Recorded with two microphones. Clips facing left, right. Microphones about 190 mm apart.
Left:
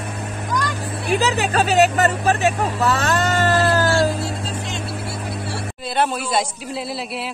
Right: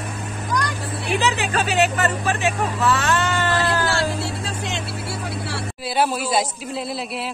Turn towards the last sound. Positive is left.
turn(degrees=0)  # may be behind; listen again after turning